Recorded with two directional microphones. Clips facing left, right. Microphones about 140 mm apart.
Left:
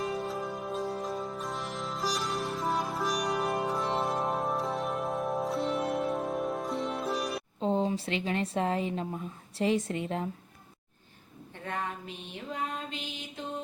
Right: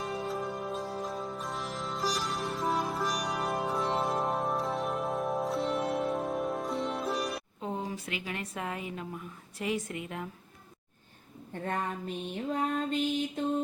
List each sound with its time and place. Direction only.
0.0 s music: centre (ahead or behind)
7.6 s speech: 25° left (ahead or behind)
11.6 s a woman's voice: 45° right (ahead or behind)
12.5 s mantra: 45° right (ahead or behind)